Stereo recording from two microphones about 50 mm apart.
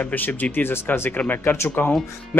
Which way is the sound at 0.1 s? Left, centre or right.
Left.